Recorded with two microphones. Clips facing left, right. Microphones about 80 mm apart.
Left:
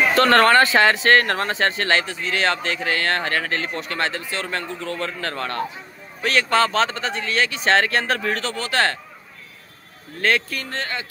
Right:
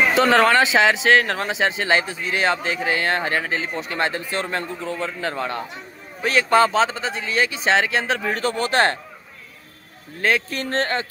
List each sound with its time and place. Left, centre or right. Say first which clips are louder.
0.1 s speech: left 4 dB; centre; by 9.0 s right
10.5 s speech: right 5 dB; right